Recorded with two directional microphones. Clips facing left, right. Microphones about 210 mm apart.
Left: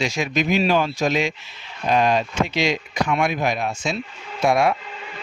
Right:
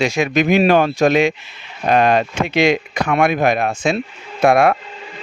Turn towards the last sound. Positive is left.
turn(degrees=-55)  # may be behind; listen again after turning